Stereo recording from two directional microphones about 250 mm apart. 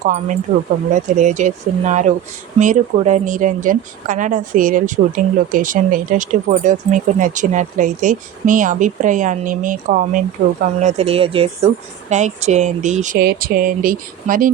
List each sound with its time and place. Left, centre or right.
0.5 s speech: right